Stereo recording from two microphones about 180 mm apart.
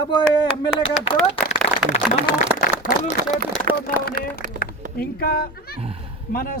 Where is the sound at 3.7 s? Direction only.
55° right (ahead or behind).